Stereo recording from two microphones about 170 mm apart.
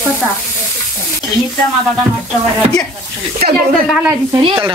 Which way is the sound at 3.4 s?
65° right (ahead or behind).